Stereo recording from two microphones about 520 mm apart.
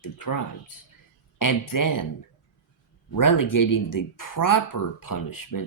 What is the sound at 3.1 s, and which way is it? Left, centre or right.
Speech, left.